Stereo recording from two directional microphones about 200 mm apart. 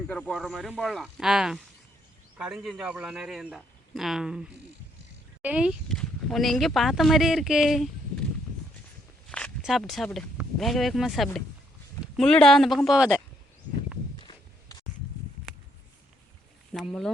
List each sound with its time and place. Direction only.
0.1 s speech: 5° left (ahead or behind)
9.3 s speech: centre (ahead or behind)
14.2 s walk: 20° left (ahead or behind)
16.7 s speech: centre (ahead or behind)